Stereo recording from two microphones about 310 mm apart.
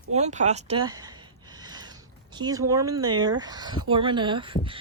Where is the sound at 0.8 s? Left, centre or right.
Centre.